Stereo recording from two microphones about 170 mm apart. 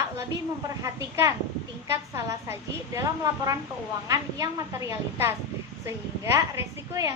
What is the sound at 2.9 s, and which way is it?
A woman's voice, 20° right (ahead or behind).